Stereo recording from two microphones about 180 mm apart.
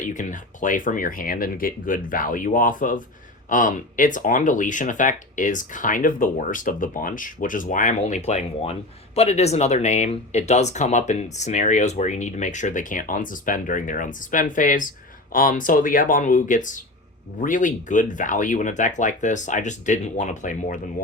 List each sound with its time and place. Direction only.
0.0 s speech: 45° left (ahead or behind)